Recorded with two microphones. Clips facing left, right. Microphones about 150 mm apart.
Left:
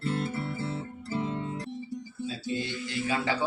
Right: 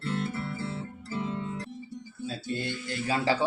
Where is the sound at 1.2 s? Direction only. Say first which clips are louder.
Even; 35° left (ahead or behind).